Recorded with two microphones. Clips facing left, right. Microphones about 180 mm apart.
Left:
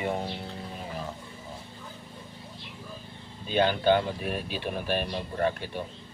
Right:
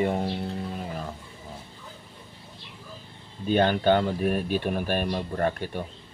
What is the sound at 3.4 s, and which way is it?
Speech, 50° right (ahead or behind).